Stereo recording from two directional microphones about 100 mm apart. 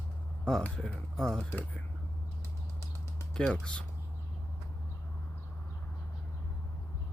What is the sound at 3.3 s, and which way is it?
Speech, 5° left (ahead or behind).